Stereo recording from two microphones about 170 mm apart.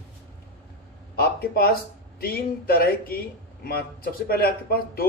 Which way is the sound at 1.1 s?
65° left (ahead or behind).